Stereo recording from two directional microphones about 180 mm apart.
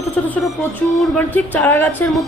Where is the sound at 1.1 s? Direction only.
10° left (ahead or behind).